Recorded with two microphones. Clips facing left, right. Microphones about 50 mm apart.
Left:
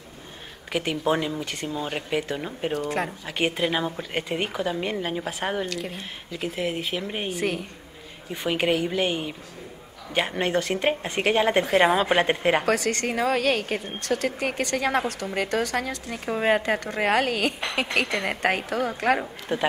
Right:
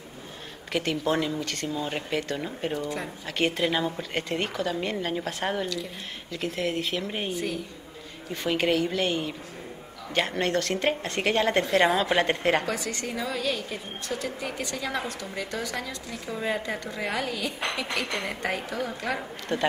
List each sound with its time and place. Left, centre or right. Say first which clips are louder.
0.7 s a woman's voice: left 2 dB; centre
2.7 s a woman's voice: left 4 dB; left
3.3 s a woman's voice: right 2 dB; centre
5.7 s a woman's voice: left 2 dB; left
6.3 s a woman's voice: left 1 dB; centre
7.3 s a woman's voice: left 4 dB; left
8.3 s a woman's voice: left 1 dB; centre
12.6 s a woman's voice: left 7 dB; left
19.5 s a woman's voice: left 1 dB; centre